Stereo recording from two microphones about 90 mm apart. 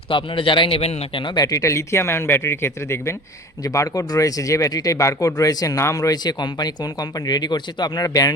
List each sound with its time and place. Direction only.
0.1 s a man's voice: 70° left (ahead or behind)
1.4 s speech: 40° left (ahead or behind)